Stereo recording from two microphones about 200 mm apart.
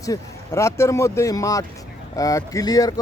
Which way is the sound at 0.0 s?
15° left (ahead or behind).